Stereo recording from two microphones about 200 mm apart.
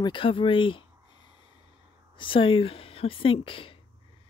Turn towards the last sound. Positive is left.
turn(degrees=25)  # may be behind; listen again after turning